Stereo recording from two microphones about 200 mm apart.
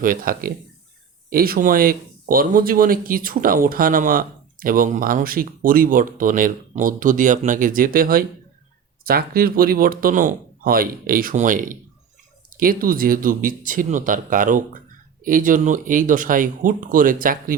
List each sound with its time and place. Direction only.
0.0 s speech: 45° right (ahead or behind)